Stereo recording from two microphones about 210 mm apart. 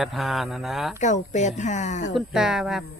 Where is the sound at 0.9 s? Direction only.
35° left (ahead or behind).